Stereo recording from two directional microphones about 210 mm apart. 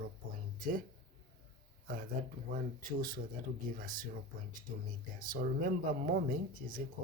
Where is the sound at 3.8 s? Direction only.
40° right (ahead or behind).